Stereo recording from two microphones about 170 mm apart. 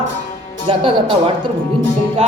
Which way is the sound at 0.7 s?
30° right (ahead or behind).